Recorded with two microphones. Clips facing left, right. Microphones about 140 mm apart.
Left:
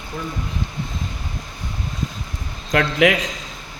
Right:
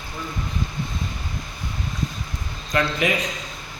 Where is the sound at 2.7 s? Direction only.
85° left.